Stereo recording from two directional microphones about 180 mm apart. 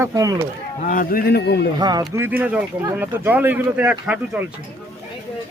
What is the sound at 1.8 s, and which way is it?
Speech, 20° right (ahead or behind).